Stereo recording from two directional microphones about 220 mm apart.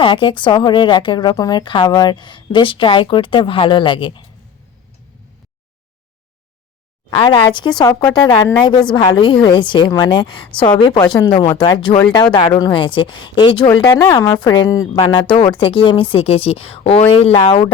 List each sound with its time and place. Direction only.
0.0 s a woman's voice: 20° left (ahead or behind)
7.1 s a woman's voice: 20° left (ahead or behind)